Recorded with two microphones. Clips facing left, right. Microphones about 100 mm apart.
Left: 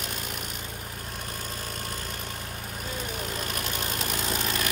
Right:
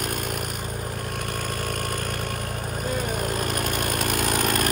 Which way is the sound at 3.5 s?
55° right (ahead or behind).